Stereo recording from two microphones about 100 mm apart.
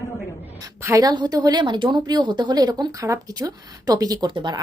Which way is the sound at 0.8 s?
35° right (ahead or behind).